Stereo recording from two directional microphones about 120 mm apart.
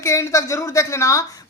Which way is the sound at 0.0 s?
25° left (ahead or behind).